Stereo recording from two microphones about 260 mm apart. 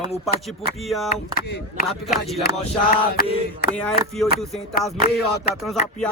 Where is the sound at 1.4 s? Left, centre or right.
Left.